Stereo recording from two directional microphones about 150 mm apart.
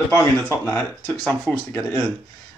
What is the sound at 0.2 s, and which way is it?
Speech, 15° left (ahead or behind).